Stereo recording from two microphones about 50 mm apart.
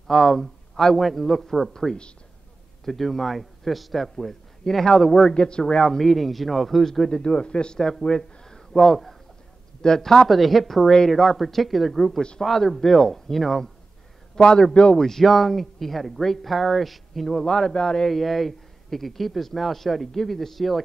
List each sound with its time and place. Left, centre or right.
0.1 s a man's voice: centre
5.3 s a man's voice: centre
5.9 s a man's voice: centre
7.8 s a man's voice: centre
14.3 s a man's voice: centre
15.0 s a man's voice: centre
17.5 s a man's voice: centre
18.0 s a man's voice: centre